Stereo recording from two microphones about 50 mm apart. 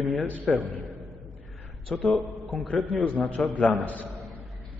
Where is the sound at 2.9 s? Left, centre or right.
Left.